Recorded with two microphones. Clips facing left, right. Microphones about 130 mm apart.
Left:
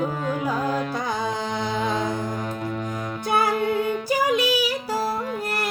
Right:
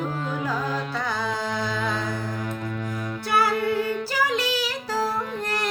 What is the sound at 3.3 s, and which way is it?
Music, 20° left (ahead or behind).